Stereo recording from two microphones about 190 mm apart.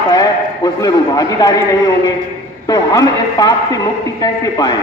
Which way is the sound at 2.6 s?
20° left (ahead or behind).